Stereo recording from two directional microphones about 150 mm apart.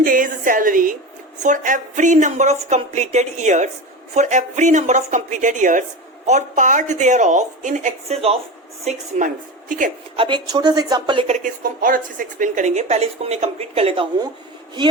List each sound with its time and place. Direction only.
0.0 s a woman's voice: 65° right (ahead or behind)
10.2 s a woman's voice: 30° right (ahead or behind)
11.3 s a woman's voice: 60° right (ahead or behind); by 14.3 s 35° right (ahead or behind)